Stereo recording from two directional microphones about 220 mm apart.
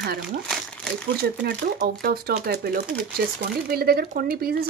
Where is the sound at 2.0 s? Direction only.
45° right (ahead or behind).